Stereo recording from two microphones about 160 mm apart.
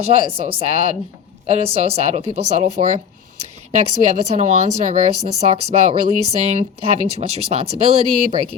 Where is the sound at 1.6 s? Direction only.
40° right (ahead or behind).